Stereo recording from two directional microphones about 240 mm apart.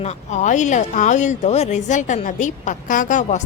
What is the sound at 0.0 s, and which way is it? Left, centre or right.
Speech, left.